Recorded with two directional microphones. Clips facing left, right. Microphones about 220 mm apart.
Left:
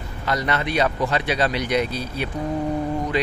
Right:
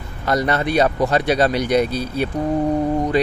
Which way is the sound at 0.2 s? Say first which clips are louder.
Right 5 dB; 40° right (ahead or behind).